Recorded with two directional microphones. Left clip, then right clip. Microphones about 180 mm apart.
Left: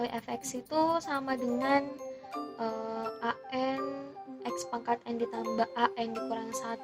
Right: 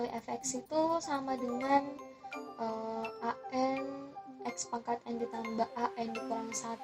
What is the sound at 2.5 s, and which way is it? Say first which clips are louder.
Music: left 2 dB; 40° left (ahead or behind).